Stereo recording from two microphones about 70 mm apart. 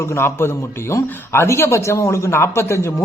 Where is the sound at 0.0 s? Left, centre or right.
Left.